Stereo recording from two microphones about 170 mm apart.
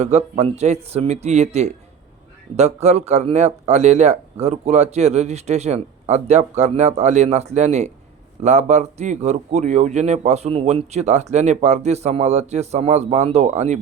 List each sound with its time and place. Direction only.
0.0 s speech: 40° right (ahead or behind)